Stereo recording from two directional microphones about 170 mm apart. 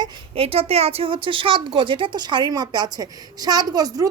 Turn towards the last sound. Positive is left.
turn(degrees=-20)  # may be behind; listen again after turning